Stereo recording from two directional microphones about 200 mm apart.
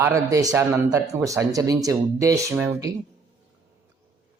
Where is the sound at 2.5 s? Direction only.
5° right (ahead or behind).